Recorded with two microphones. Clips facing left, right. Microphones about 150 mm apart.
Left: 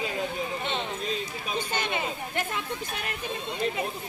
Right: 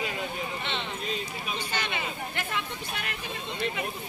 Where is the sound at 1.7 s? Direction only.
45° left (ahead or behind).